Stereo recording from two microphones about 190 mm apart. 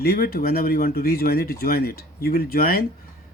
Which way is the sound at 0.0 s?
55° left (ahead or behind).